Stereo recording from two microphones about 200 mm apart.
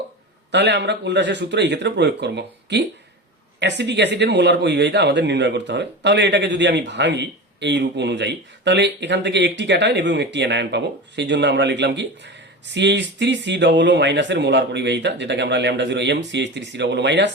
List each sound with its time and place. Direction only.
0.5 s speech: 60° right (ahead or behind)